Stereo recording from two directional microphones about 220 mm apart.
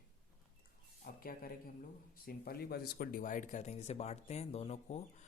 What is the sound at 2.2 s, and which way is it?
Speech, 40° left (ahead or behind).